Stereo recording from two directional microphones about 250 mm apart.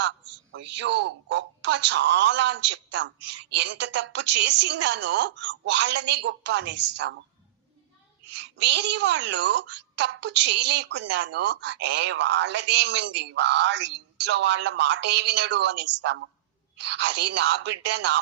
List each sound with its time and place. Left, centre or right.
0.5 s speech: right
8.3 s speech: right